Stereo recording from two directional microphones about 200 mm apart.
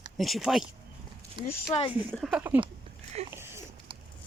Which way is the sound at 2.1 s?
5° right (ahead or behind).